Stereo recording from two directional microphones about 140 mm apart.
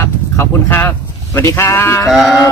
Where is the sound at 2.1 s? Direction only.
Centre (ahead or behind).